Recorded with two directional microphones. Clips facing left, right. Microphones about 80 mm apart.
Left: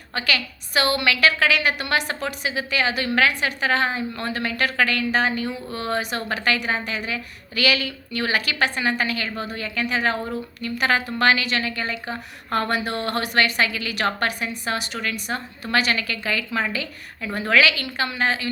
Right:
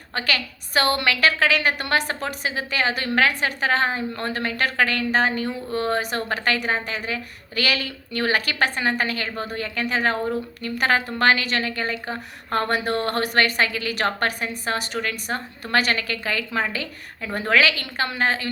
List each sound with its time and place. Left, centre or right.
0.1 s a woman's voice: right